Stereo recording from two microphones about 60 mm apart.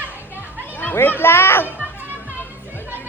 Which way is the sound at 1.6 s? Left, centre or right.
Right.